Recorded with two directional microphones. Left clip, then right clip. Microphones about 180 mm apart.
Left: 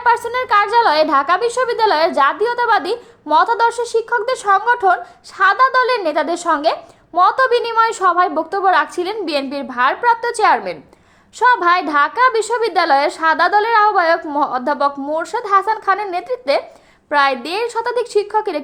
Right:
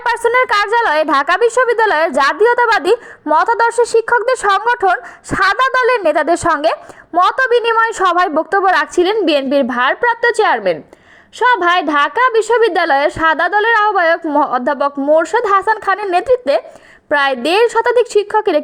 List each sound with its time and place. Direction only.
0.0 s a woman's voice: 30° right (ahead or behind)
7.1 s a woman's voice: 15° right (ahead or behind)
7.7 s a woman's voice: 30° right (ahead or behind)